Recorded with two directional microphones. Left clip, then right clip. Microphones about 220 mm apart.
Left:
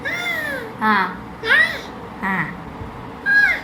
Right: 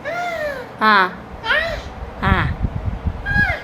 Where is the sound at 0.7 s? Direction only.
25° right (ahead or behind).